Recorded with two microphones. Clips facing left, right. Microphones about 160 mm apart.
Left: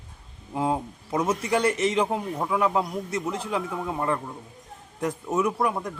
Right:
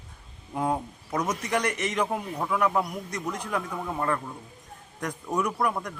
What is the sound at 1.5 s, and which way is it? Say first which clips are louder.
A man's voice: left 5 dB; 30° left (ahead or behind).